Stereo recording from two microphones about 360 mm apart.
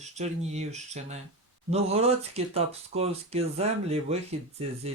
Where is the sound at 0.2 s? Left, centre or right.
Centre.